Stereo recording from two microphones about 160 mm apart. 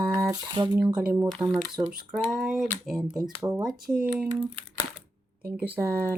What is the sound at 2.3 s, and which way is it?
Speech, 5° right (ahead or behind).